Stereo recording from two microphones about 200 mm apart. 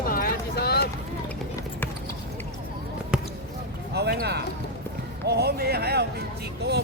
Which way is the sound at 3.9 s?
55° right (ahead or behind).